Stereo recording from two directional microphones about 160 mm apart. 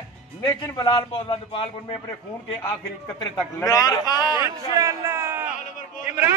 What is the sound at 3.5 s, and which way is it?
Speech, 20° left (ahead or behind).